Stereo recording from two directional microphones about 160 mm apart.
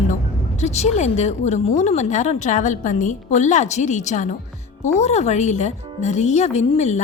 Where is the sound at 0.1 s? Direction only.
45° left (ahead or behind).